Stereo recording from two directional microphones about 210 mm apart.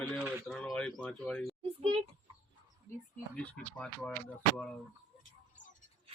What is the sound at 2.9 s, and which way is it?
Speech, 10° left (ahead or behind).